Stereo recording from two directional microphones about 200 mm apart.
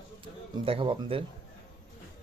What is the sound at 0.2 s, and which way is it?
A man's voice, 25° right (ahead or behind).